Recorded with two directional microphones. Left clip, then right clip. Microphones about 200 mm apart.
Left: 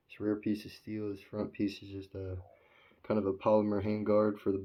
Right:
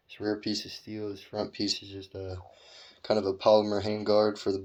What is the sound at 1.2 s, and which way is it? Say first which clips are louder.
Speech: right 5 dB; 25° left (ahead or behind).